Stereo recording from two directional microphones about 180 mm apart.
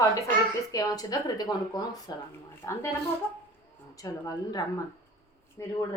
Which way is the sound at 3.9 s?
20° left (ahead or behind).